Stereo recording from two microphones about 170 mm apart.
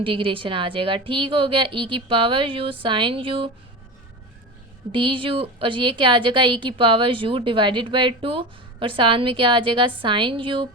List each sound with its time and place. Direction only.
0.0 s a woman's voice: 30° right (ahead or behind)
4.9 s a woman's voice: 30° right (ahead or behind)